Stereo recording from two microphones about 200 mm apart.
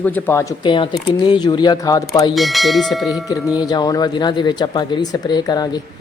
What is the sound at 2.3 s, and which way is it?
Speech, centre (ahead or behind).